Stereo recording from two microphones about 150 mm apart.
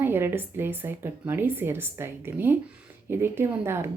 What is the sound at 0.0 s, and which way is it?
A woman's voice, 15° right (ahead or behind).